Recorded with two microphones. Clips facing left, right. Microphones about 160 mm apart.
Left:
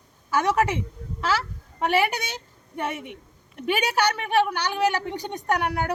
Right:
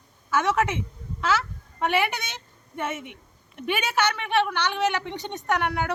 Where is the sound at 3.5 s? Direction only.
40° left (ahead or behind).